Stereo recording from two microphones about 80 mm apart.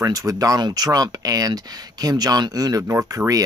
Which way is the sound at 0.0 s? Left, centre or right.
Right.